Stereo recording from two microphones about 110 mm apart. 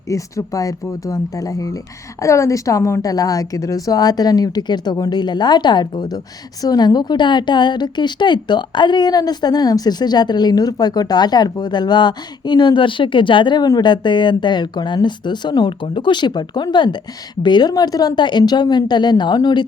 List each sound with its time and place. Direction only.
0.1 s a woman's voice: 30° left (ahead or behind)